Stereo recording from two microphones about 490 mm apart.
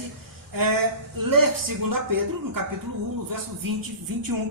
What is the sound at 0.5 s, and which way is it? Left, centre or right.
Speech, right.